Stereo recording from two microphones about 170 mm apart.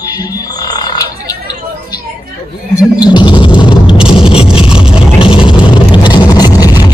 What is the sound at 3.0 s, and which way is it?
Music, 25° left (ahead or behind).